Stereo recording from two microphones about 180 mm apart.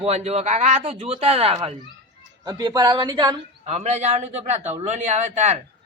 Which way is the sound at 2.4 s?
20° right (ahead or behind).